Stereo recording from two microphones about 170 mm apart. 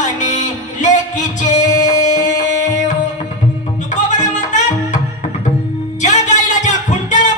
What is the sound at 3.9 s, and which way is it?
Music, 45° left (ahead or behind).